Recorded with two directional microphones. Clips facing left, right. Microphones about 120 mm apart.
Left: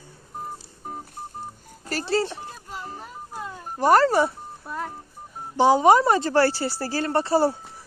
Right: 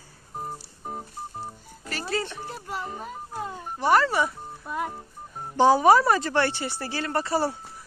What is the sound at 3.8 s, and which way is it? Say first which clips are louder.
Speech: left 4 dB; 40° left (ahead or behind).